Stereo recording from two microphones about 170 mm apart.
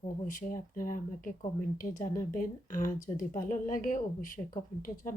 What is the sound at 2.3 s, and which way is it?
Speech, 50° left (ahead or behind).